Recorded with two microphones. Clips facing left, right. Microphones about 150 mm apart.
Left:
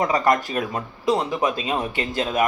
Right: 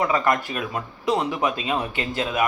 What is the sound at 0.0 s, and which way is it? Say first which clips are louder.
Speech: left 2 dB; 40° left (ahead or behind).